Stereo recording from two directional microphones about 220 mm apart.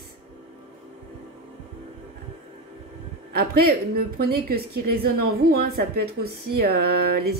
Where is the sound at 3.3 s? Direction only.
45° right (ahead or behind).